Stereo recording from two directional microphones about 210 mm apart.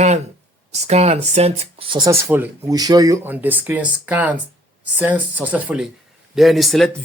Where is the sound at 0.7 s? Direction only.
30° right (ahead or behind).